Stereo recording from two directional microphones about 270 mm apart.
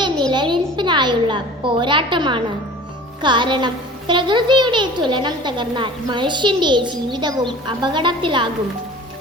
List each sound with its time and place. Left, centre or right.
0.3 s a woman's voice: centre